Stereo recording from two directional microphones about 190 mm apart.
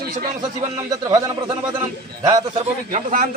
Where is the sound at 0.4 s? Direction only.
20° right (ahead or behind).